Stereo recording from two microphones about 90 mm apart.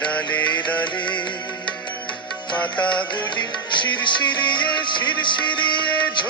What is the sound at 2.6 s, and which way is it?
Music, 15° left (ahead or behind).